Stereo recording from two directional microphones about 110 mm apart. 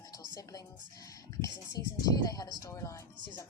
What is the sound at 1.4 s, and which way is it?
Speech, 30° left (ahead or behind).